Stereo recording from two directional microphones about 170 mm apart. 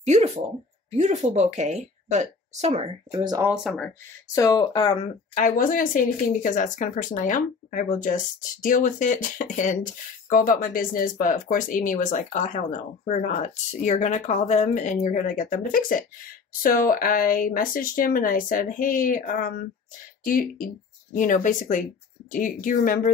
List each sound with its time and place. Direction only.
0.0 s a woman's voice: 45° right (ahead or behind)
3.2 s speech: 25° right (ahead or behind)
3.4 s speech: 5° left (ahead or behind)
4.4 s speech: 20° left (ahead or behind)
5.3 s speech: 50° left (ahead or behind)